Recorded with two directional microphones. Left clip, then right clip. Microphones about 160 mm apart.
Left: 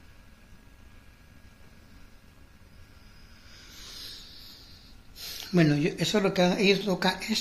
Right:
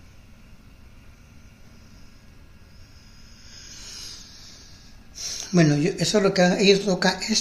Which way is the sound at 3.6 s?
10° right (ahead or behind).